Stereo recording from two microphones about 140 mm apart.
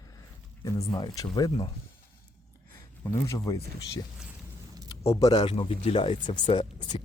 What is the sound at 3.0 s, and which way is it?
Speech, 20° left (ahead or behind).